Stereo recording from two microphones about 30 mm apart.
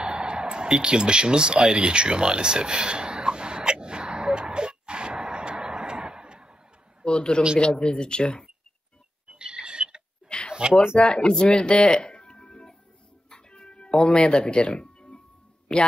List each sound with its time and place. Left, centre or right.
0.0 s a sound: right
7.1 s a man's voice: left
9.3 s creak: right
10.2 s a sound: left
11.0 s speech: left
12.0 s music: left
15.7 s a man's voice: left